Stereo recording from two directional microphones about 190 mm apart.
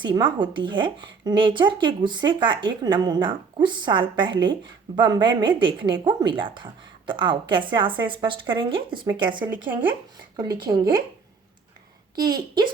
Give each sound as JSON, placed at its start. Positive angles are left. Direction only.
{"t": 0.0, "sound": "speech", "side_deg": -25}
{"t": 9.5, "sound": "speech", "side_deg": -10}
{"t": 10.3, "sound": "speech", "side_deg": -20}
{"t": 12.1, "sound": "speech", "side_deg": -20}